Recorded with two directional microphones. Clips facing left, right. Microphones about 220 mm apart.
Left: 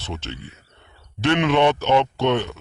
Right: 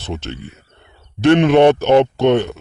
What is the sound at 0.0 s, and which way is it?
Speech, 50° right (ahead or behind).